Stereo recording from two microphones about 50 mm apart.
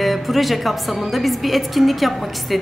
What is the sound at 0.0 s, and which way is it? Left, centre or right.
A woman's voice, centre.